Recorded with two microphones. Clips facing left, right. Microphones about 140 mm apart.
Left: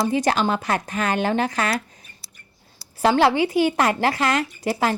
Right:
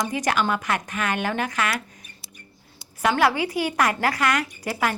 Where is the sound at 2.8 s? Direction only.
30° left (ahead or behind).